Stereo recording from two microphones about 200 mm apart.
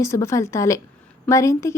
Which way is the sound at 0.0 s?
15° left (ahead or behind).